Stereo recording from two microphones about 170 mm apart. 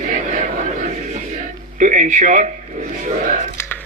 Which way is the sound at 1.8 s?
50° right (ahead or behind).